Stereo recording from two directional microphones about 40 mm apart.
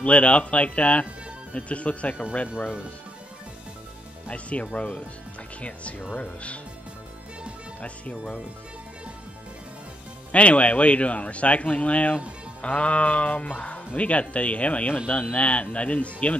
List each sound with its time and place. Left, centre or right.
0.0 s speech: left
4.3 s speech: left
6.1 s speech: left
7.8 s speech: left
10.3 s speech: left